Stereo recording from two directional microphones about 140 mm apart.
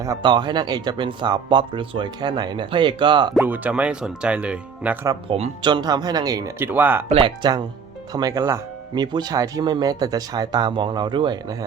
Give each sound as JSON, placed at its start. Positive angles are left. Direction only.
{"t": 0.0, "sound": "speech", "side_deg": -30}
{"t": 3.4, "sound": "speech", "side_deg": -10}
{"t": 5.3, "sound": "speech", "side_deg": -40}
{"t": 5.6, "sound": "speech", "side_deg": -30}
{"t": 6.7, "sound": "speech", "side_deg": -15}
{"t": 7.1, "sound": "speech", "side_deg": -40}